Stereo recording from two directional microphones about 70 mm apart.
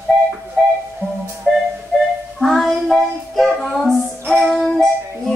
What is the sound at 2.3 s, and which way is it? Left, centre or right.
Child singing, centre.